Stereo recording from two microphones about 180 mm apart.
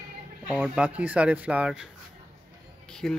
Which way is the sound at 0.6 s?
5° right (ahead or behind).